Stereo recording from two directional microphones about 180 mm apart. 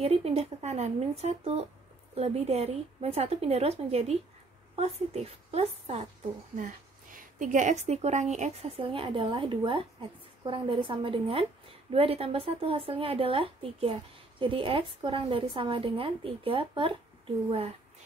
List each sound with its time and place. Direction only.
0.0 s a woman's voice: 35° right (ahead or behind)
7.2 s speech: 45° right (ahead or behind); by 16.9 s 30° right (ahead or behind)